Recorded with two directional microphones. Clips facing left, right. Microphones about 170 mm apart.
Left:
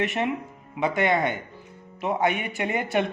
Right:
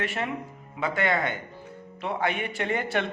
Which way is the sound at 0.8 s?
25° left (ahead or behind).